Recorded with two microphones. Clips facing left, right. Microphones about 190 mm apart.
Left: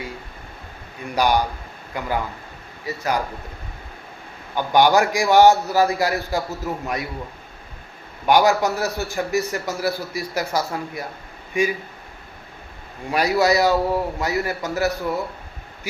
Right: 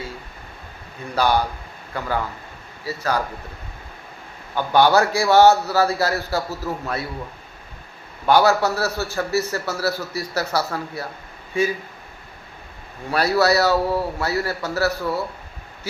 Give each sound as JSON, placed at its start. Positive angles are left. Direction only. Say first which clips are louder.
{"t": 1.1, "sound": "a man's voice", "louder": "even", "side_deg": 15}
{"t": 4.5, "sound": "a man's voice", "louder": "even", "side_deg": 15}
{"t": 8.3, "sound": "a man's voice", "louder": "even", "side_deg": 15}
{"t": 13.1, "sound": "a man's voice", "louder": "even", "side_deg": 15}